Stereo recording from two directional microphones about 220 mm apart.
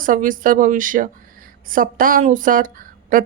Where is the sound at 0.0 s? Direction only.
40° right (ahead or behind).